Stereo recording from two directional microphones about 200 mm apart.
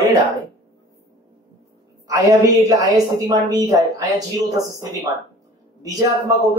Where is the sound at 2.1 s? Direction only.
15° right (ahead or behind).